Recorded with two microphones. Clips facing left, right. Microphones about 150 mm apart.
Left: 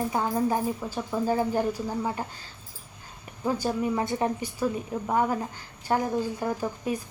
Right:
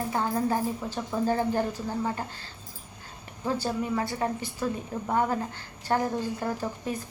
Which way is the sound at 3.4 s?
15° left (ahead or behind).